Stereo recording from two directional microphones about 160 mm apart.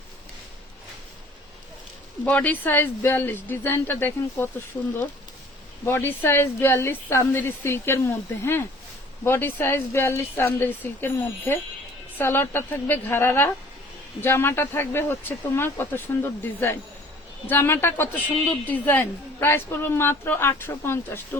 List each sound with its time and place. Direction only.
2.2 s a woman's voice: 10° left (ahead or behind)
5.8 s a woman's voice: 15° left (ahead or behind)